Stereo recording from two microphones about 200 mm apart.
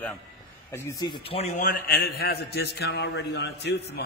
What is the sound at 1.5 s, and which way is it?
A man's voice, 50° left (ahead or behind).